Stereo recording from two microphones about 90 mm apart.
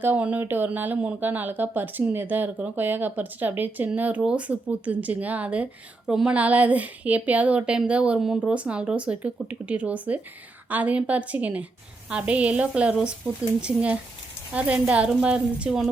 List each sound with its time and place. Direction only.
0.0 s speech: 20° right (ahead or behind)